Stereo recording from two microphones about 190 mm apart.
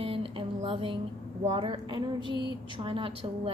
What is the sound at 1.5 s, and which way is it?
A woman's voice, 30° right (ahead or behind).